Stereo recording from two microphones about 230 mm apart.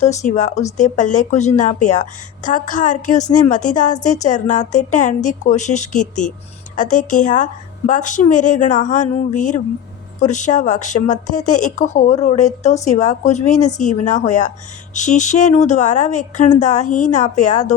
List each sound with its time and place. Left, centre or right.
0.0 s a woman's voice: left